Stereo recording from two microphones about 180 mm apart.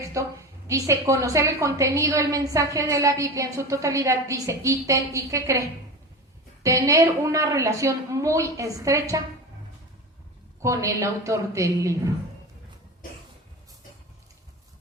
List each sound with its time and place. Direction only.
0.0 s a woman's voice: 15° right (ahead or behind)
10.6 s a woman's voice: 15° right (ahead or behind)